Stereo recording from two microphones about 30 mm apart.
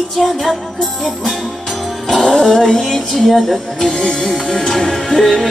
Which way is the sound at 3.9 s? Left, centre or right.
Left.